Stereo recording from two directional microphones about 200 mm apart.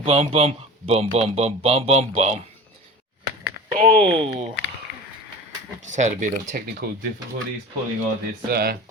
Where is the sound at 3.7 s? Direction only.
25° right (ahead or behind).